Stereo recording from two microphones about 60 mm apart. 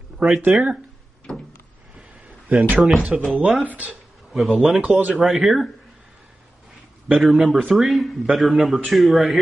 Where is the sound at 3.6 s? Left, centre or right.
Right.